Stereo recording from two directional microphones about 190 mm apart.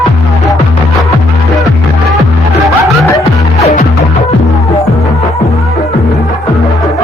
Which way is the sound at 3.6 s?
35° left (ahead or behind).